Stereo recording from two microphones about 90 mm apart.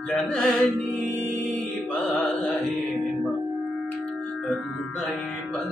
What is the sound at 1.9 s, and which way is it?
Mantra, 10° left (ahead or behind).